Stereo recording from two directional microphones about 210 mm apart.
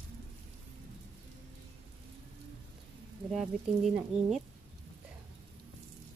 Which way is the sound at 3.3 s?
5° right (ahead or behind).